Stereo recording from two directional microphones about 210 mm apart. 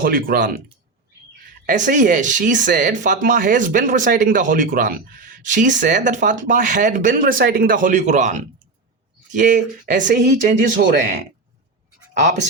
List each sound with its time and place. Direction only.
0.0 s speech: 45° right (ahead or behind)
1.6 s speech: 40° right (ahead or behind)
12.2 s speech: 35° right (ahead or behind)